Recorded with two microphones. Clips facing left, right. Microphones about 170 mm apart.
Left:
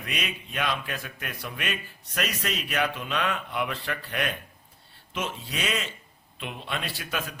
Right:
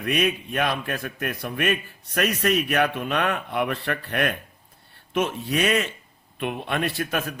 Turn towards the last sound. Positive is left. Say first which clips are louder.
# right 7 dB
turn(degrees=-55)  # may be behind; listen again after turning